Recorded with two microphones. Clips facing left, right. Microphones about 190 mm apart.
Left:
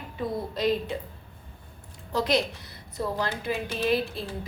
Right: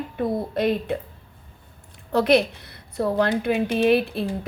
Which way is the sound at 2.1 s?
60° right (ahead or behind).